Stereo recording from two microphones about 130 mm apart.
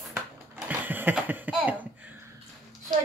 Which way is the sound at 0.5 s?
15° right (ahead or behind).